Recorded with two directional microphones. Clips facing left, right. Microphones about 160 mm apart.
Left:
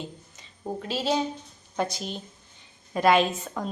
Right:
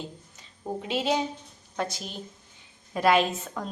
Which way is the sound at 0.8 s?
20° right (ahead or behind).